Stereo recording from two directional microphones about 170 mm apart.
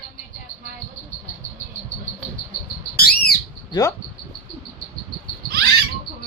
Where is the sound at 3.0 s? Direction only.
65° left (ahead or behind).